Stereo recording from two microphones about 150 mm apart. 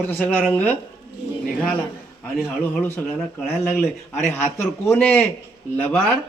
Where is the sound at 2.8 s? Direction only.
10° left (ahead or behind).